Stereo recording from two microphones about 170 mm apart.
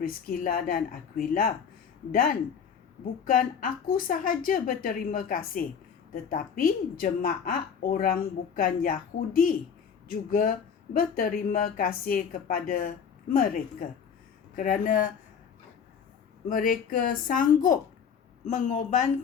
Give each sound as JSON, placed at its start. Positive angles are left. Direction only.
{"t": 0.0, "sound": "a woman's voice", "side_deg": 55}
{"t": 3.2, "sound": "a woman's voice", "side_deg": 55}
{"t": 16.5, "sound": "speech", "side_deg": 55}